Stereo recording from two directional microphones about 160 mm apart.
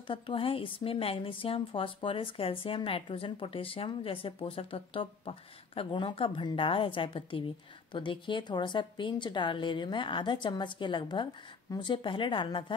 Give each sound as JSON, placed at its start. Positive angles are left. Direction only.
{"t": 0.0, "sound": "a woman's voice", "side_deg": 35}